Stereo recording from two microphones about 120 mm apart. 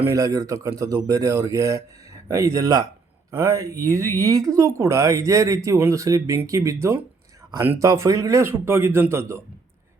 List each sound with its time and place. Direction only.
0.1 s speech: 25° right (ahead or behind)